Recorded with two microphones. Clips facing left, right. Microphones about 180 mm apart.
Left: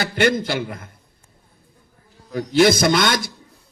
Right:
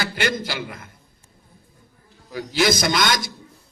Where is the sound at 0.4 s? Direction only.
50° left (ahead or behind).